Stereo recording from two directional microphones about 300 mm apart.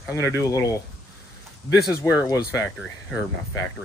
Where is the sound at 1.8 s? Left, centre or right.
Centre.